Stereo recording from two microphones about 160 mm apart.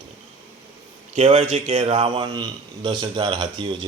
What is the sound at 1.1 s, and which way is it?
A man's voice, 45° right (ahead or behind).